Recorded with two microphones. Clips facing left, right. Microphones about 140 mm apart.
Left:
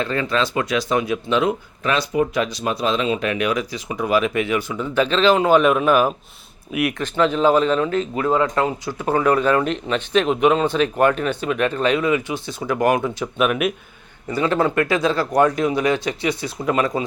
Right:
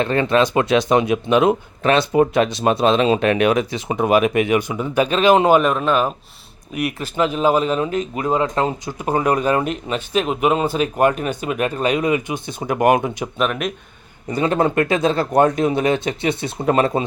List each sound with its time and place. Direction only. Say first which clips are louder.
0.1 s speech: right 5 dB; 25° right (ahead or behind)
1.5 s speech: right 5 dB; 60° right (ahead or behind)
2.0 s speech: right 4 dB; 25° right (ahead or behind)
2.8 s speech: right 5 dB; 65° right (ahead or behind)
3.3 s speech: right 5 dB; 25° right (ahead or behind)
5.5 s speech: left 1 dB; 5° left (ahead or behind)
7.0 s speech: even; 10° right (ahead or behind)
13.4 s speech: left 2 dB; 5° left (ahead or behind)
14.3 s speech: right 1 dB; 20° right (ahead or behind)